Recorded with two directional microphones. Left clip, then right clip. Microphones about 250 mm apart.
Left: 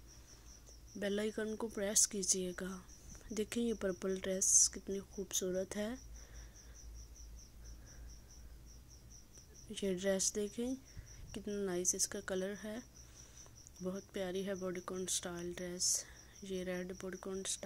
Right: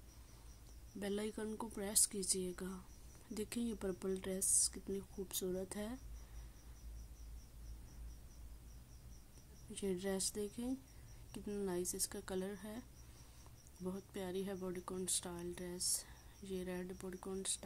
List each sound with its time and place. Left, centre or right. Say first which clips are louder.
0.9 s speech: left 5 dB; centre
9.7 s speech: left 5 dB; centre
13.8 s speech: left 5 dB; centre